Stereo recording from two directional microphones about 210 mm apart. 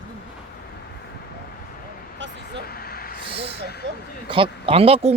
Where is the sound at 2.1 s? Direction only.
60° right (ahead or behind).